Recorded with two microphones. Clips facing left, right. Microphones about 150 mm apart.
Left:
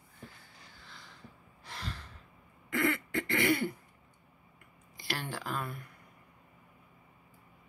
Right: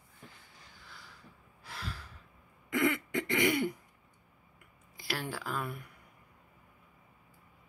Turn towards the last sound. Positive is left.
turn(degrees=-10)  # may be behind; listen again after turning